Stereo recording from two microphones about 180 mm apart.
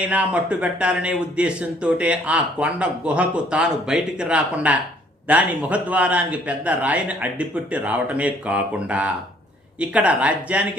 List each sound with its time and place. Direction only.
0.0 s speech: 5° right (ahead or behind)